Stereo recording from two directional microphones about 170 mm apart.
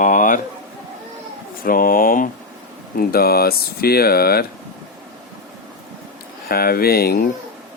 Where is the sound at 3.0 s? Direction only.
60° left (ahead or behind).